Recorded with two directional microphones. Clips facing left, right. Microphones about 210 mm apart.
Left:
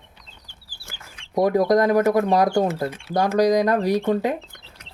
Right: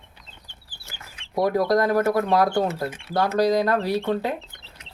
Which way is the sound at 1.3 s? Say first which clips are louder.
Left 3 dB; 20° left (ahead or behind).